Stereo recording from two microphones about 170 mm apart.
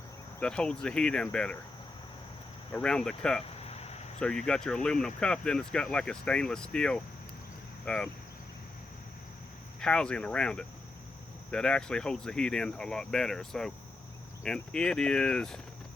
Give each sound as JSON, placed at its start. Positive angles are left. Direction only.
{"t": 0.3, "sound": "speech", "side_deg": 5}
{"t": 2.7, "sound": "speech", "side_deg": 5}
{"t": 3.4, "sound": "a sound", "side_deg": 35}
{"t": 4.2, "sound": "speech", "side_deg": 5}
{"t": 9.8, "sound": "speech", "side_deg": 5}